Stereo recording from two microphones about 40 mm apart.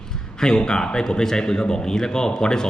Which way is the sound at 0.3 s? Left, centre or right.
Centre.